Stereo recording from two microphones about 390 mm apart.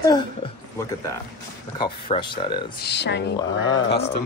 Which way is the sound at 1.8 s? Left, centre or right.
Centre.